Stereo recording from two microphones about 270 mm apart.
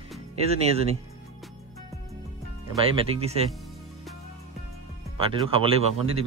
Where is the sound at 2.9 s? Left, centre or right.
Right.